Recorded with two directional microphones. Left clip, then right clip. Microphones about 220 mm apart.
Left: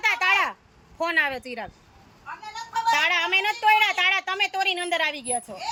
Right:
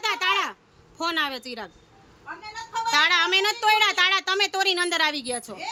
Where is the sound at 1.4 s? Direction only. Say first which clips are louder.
Left 1 dB; centre (ahead or behind).